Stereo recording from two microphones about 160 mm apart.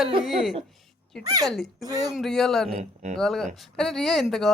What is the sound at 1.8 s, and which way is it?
Laughter, 25° right (ahead or behind).